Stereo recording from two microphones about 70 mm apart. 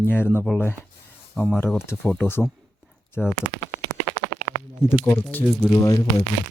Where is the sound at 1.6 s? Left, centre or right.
Left.